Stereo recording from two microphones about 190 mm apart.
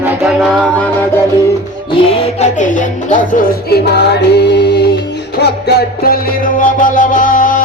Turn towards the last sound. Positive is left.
turn(degrees=45)  # may be behind; listen again after turning